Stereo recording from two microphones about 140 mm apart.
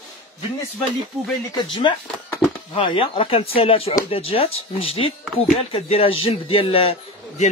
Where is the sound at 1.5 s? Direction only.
35° left (ahead or behind).